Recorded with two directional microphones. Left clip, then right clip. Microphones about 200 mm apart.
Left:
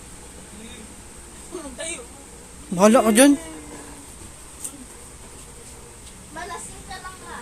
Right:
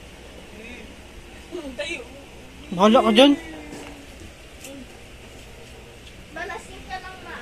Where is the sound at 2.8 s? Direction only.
45° left (ahead or behind).